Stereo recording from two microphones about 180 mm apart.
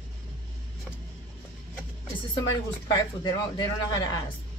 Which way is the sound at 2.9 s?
20° left (ahead or behind).